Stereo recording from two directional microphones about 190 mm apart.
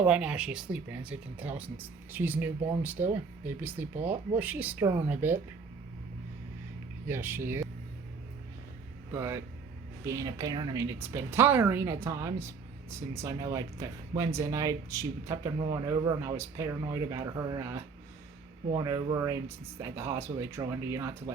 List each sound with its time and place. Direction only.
0.0 s speech: 5° right (ahead or behind)
7.1 s speech: 10° right (ahead or behind)
9.1 s speech: 15° right (ahead or behind)